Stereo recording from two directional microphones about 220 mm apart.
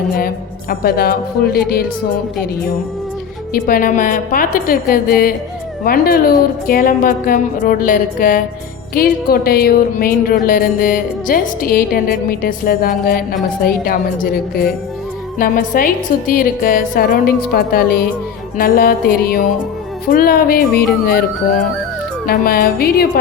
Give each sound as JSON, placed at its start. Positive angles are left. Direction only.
{"t": 0.7, "sound": "a woman's voice", "side_deg": 45}
{"t": 3.5, "sound": "music", "side_deg": 40}
{"t": 22.3, "sound": "a woman's voice", "side_deg": 40}